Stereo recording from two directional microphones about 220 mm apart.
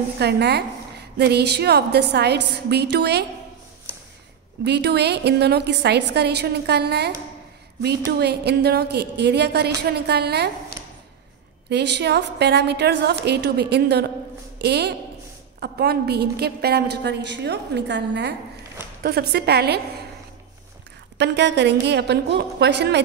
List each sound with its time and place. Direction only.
0.2 s a woman's voice: 50° right (ahead or behind)
4.6 s a woman's voice: 50° right (ahead or behind)
8.2 s a woman's voice: 45° right (ahead or behind)
11.7 s a woman's voice: 50° right (ahead or behind)
21.2 s a woman's voice: 50° right (ahead or behind)